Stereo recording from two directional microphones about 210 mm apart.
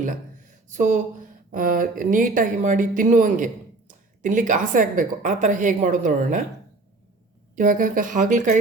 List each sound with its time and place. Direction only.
0.7 s speech: 35° right (ahead or behind)
7.5 s speech: 40° right (ahead or behind)